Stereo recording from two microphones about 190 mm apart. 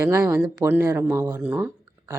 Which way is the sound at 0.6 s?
15° right (ahead or behind).